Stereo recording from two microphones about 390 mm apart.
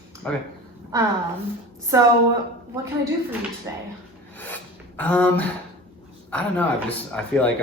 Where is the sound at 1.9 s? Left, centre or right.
Centre.